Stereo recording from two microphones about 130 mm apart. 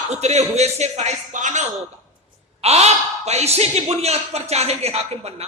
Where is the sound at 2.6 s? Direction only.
55° right (ahead or behind).